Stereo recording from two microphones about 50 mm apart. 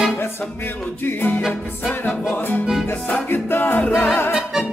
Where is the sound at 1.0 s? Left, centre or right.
Left.